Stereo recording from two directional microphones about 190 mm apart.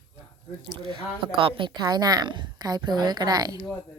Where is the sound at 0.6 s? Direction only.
25° right (ahead or behind).